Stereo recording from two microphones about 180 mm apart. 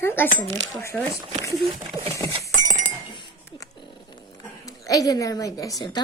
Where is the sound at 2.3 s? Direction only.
45° right (ahead or behind).